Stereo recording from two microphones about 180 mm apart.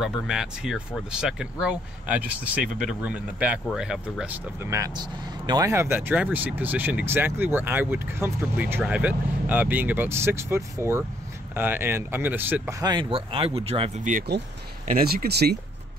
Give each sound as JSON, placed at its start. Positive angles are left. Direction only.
{"t": 0.0, "sound": "speech", "side_deg": 0}
{"t": 14.9, "sound": "speech", "side_deg": -55}